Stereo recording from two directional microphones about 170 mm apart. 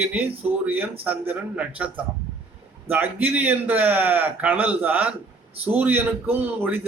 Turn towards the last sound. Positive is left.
turn(degrees=-10)  # may be behind; listen again after turning